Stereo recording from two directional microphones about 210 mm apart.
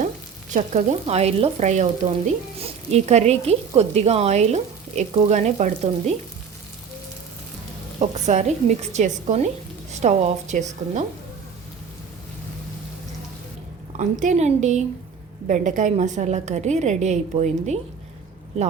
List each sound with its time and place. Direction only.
0.5 s frying: 35° right (ahead or behind)
7.9 s frying: 35° right (ahead or behind)
13.9 s frying: 35° right (ahead or behind)